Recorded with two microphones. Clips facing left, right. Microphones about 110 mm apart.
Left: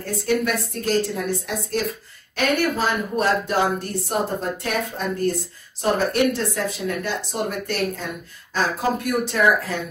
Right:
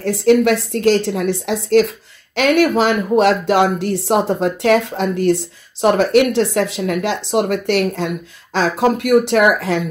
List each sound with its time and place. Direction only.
0.0 s a woman's voice: 90° right